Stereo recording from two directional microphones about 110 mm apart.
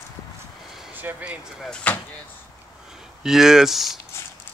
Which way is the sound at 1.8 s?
15° left (ahead or behind).